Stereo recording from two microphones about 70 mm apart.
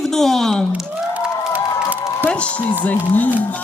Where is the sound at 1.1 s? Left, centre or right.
Right.